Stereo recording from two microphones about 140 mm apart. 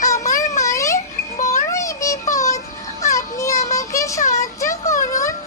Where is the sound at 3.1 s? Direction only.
25° left (ahead or behind).